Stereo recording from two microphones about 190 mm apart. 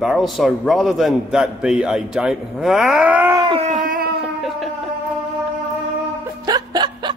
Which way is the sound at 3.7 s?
45° right (ahead or behind).